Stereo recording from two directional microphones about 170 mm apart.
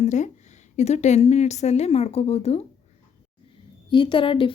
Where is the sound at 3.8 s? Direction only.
30° left (ahead or behind).